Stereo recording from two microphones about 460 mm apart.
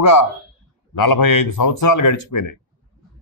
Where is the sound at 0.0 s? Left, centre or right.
Left.